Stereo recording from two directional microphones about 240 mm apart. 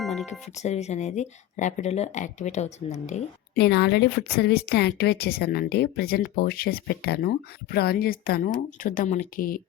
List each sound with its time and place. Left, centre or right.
0.0 s music: centre
0.3 s speech: left
3.6 s speech: left